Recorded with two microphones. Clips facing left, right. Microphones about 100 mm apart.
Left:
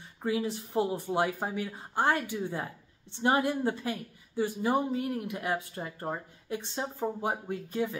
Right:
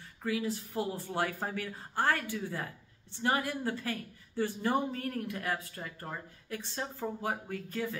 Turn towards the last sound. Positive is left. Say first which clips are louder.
# left 4 dB
turn(degrees=20)  # may be behind; listen again after turning